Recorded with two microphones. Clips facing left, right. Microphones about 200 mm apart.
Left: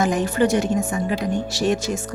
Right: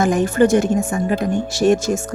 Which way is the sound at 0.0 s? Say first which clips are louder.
Right 4 dB; 50° right (ahead or behind).